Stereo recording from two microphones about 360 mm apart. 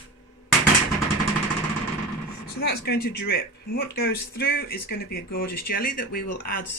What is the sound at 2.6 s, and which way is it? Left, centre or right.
Speech, left.